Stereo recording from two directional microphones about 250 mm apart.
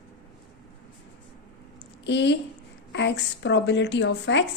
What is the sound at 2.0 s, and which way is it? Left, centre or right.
A woman's voice, left.